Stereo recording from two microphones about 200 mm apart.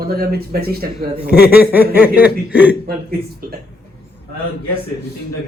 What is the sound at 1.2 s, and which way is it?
Speech, 50° left (ahead or behind).